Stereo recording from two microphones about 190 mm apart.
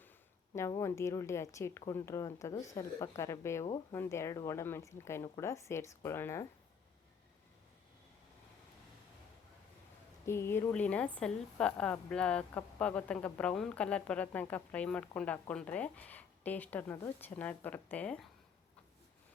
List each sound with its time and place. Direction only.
0.8 s a woman's voice: 15° left (ahead or behind)
10.2 s a woman's voice: 15° left (ahead or behind)